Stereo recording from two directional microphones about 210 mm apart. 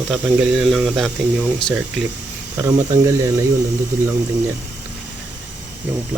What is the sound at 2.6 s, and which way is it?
Speech, 15° right (ahead or behind).